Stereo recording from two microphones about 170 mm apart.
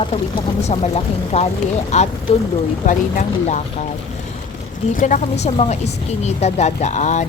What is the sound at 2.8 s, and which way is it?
Speech, 50° left (ahead or behind).